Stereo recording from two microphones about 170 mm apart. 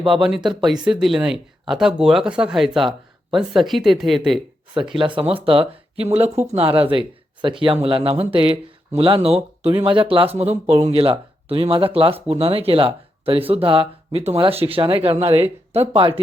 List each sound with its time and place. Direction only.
0.1 s speech: centre (ahead or behind)
4.9 s speech: 30° right (ahead or behind)